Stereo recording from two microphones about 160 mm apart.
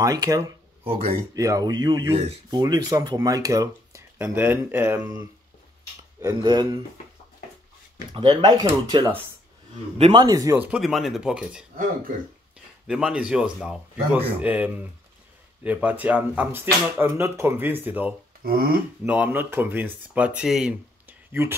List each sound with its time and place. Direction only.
0.0 s speech: 20° right (ahead or behind)
0.8 s a man's voice: 40° right (ahead or behind)
1.3 s speech: 20° right (ahead or behind)
6.2 s speech: 30° right (ahead or behind)
8.1 s speech: 30° right (ahead or behind)
9.9 s a man's voice: 40° right (ahead or behind)
10.2 s speech: 20° right (ahead or behind)
10.6 s a man's voice: 5° right (ahead or behind)
12.8 s a man's voice: 5° right (ahead or behind)
18.4 s speech: 70° right (ahead or behind)
19.0 s speech: 10° right (ahead or behind)